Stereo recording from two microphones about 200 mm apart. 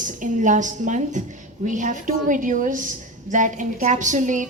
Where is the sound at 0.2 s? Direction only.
40° right (ahead or behind).